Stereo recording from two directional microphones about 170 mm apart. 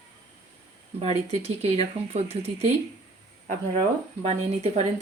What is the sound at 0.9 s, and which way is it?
Speech, 40° right (ahead or behind).